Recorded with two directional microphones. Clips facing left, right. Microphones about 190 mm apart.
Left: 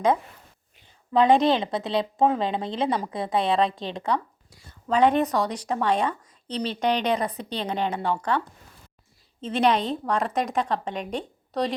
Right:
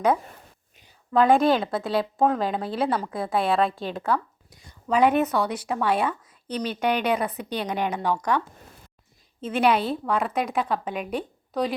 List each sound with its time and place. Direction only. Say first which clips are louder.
1.1 s a woman's voice: even; 5° right (ahead or behind)
4.4 s a sound: even; 20° right (ahead or behind)
4.9 s a woman's voice: even; 10° right (ahead or behind)
9.4 s a woman's voice: right 1 dB; 5° right (ahead or behind)